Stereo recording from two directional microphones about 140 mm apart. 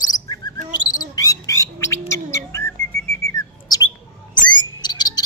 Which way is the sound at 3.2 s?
25° left (ahead or behind).